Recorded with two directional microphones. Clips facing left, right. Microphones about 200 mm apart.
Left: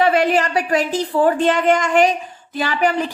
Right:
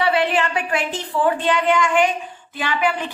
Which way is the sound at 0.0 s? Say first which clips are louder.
Left 3 dB; 45° left (ahead or behind).